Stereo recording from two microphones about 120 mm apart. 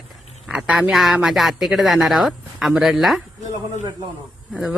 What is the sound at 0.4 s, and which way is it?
Speech, 5° right (ahead or behind).